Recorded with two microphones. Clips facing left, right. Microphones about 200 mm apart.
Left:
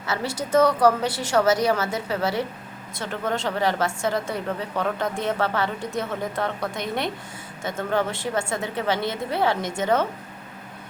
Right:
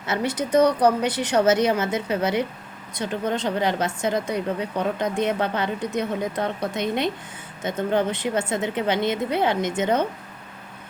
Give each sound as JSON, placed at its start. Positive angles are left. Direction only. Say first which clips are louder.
{"t": 0.0, "sound": "a woman's voice", "louder": "right 3 dB", "side_deg": -20}